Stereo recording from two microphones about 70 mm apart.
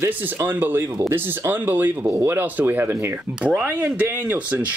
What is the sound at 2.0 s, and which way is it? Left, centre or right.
Speech, right.